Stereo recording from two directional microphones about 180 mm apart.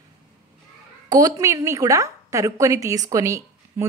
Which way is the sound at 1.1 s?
20° right (ahead or behind).